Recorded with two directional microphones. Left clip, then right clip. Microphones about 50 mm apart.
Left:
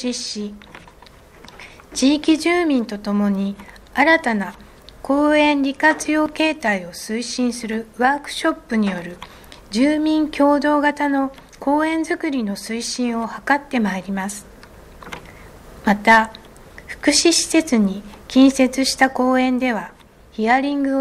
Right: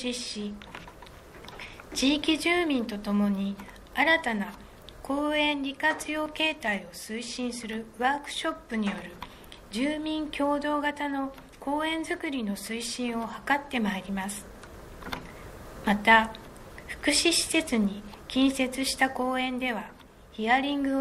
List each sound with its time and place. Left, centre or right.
0.0 s a woman's voice: left
1.6 s a woman's voice: left
7.2 s a woman's voice: left
7.7 s a woman's voice: left
9.7 s a woman's voice: left
15.8 s a woman's voice: left
18.9 s a woman's voice: left